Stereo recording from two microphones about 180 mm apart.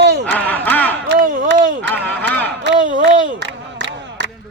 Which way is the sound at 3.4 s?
75° right (ahead or behind).